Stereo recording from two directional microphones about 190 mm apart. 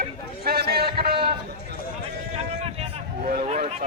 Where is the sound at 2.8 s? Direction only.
40° right (ahead or behind).